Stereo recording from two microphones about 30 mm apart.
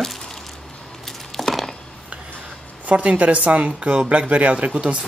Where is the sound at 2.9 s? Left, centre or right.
Right.